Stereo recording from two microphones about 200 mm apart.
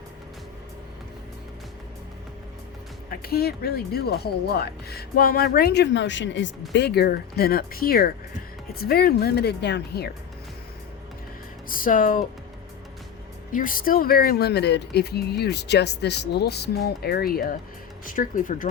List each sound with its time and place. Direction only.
3.1 s speech: 50° left (ahead or behind)
11.7 s speech: 45° left (ahead or behind)
13.5 s speech: 45° left (ahead or behind)